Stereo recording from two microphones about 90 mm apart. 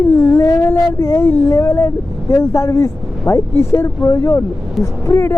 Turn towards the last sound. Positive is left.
turn(degrees=30)  # may be behind; listen again after turning